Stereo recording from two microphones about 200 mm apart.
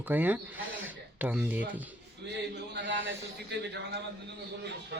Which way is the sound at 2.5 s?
60° right (ahead or behind).